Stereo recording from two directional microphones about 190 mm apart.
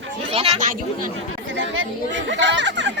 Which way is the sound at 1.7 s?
70° right (ahead or behind).